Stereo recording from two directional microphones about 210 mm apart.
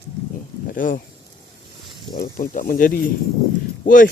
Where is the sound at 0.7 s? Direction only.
40° left (ahead or behind).